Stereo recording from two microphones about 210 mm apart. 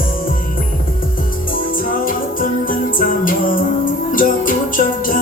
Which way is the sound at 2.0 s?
40° left (ahead or behind).